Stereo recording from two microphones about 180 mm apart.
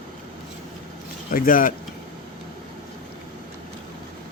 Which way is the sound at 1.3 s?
50° left (ahead or behind).